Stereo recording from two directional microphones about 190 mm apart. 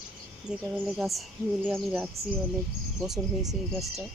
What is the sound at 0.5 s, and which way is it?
Speech, 5° right (ahead or behind).